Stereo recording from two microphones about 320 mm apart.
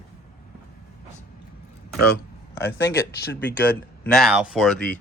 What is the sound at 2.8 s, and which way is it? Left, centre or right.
Speech, left.